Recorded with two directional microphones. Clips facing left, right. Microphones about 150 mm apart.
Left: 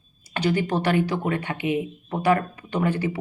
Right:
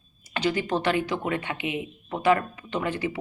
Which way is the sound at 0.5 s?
35° left (ahead or behind).